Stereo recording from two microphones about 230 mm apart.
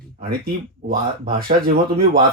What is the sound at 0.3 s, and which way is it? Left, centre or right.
Speech, right.